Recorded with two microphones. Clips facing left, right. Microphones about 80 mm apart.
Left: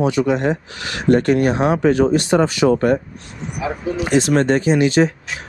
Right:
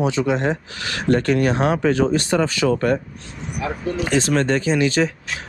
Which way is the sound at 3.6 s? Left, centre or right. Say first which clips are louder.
Left 2 dB; centre.